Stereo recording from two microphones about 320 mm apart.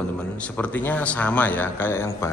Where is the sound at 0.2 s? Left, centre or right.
Centre.